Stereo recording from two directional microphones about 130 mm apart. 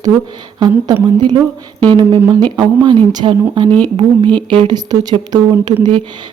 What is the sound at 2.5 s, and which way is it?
Speech, 35° right (ahead or behind).